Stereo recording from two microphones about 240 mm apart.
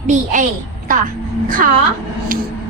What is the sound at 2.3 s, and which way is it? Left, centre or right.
Speech, right.